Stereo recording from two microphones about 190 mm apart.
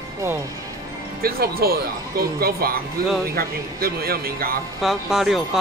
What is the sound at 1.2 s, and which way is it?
Speech, 50° right (ahead or behind).